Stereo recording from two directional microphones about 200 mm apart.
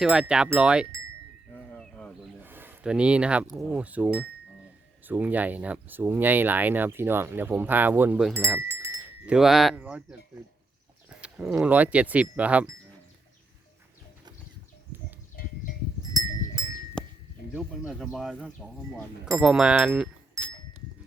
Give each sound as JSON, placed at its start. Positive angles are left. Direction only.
{"t": 0.0, "sound": "speech", "side_deg": 0}
{"t": 1.7, "sound": "bird", "side_deg": 0}
{"t": 2.4, "sound": "a sound", "side_deg": -10}
{"t": 3.6, "sound": "speech", "side_deg": -5}
{"t": 14.9, "sound": "livestock", "side_deg": -10}
{"t": 17.0, "sound": "a sound", "side_deg": 5}
{"t": 17.5, "sound": "speech", "side_deg": -5}
{"t": 20.4, "sound": "livestock", "side_deg": -15}